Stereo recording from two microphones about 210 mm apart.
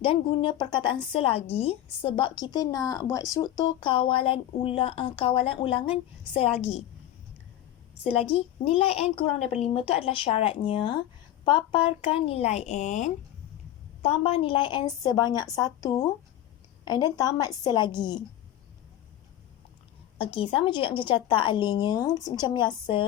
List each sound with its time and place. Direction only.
0.0 s speech: 25° left (ahead or behind)
8.0 s speech: 25° left (ahead or behind)
20.1 s speech: 25° left (ahead or behind)